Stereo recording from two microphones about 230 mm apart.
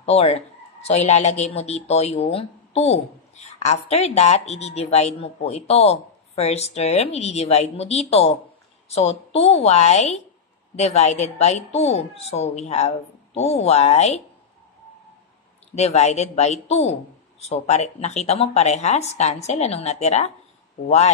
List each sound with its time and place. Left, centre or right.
0.0 s speech: left
15.7 s speech: left